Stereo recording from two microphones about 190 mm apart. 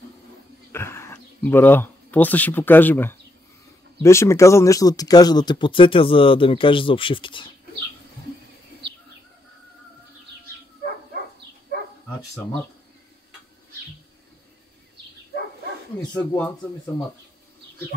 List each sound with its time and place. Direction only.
0.7 s speech: 15° left (ahead or behind)
16.2 s speech: 10° left (ahead or behind)